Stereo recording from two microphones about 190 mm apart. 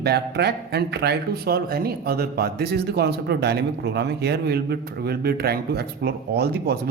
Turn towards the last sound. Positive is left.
turn(degrees=-55)  # may be behind; listen again after turning